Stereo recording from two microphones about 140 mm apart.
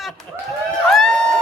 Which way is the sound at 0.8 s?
5° left (ahead or behind).